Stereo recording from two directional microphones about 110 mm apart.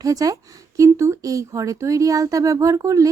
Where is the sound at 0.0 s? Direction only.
35° right (ahead or behind).